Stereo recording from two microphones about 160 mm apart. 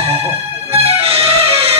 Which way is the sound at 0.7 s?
40° right (ahead or behind).